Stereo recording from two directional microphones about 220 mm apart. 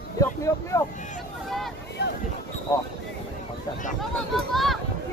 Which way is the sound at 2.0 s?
50° left (ahead or behind).